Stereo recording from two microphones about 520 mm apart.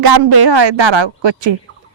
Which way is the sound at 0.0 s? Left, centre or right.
Right.